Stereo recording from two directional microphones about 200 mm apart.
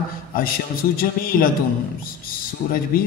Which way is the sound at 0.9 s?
45° left (ahead or behind).